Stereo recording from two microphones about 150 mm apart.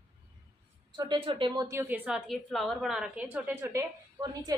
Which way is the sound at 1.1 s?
30° right (ahead or behind).